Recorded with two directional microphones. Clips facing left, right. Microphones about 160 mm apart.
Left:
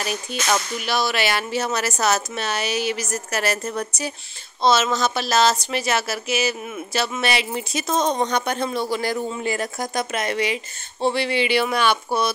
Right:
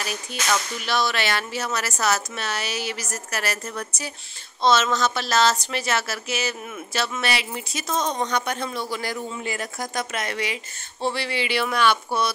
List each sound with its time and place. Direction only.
0.8 s speech: 10° left (ahead or behind)
1.5 s a woman's voice: 20° left (ahead or behind)
4.6 s speech: 10° left (ahead or behind); by 9.7 s 35° left (ahead or behind)
9.8 s a woman's voice: 20° left (ahead or behind)